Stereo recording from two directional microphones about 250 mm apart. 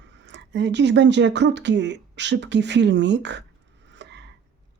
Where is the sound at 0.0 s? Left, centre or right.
Right.